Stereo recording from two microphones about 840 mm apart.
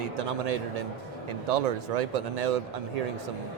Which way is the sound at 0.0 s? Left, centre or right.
Right.